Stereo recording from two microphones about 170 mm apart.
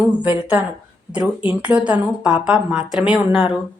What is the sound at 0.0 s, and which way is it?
A woman's voice, 10° right (ahead or behind).